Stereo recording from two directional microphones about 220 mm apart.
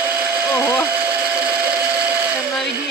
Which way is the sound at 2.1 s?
5° right (ahead or behind).